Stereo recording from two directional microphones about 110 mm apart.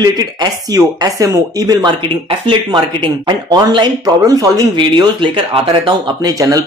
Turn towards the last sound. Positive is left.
turn(degrees=-30)  # may be behind; listen again after turning